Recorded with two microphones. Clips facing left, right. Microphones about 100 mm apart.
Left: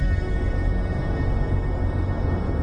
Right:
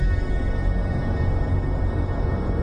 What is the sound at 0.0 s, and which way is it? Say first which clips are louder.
Music: even; centre (ahead or behind).